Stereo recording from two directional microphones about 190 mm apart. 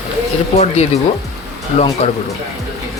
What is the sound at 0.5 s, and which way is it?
Speech, 35° left (ahead or behind).